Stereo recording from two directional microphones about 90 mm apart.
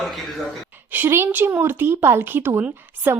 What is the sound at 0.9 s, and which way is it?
A woman's voice, 25° right (ahead or behind).